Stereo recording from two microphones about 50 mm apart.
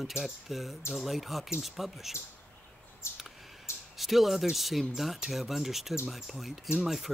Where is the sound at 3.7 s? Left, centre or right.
Left.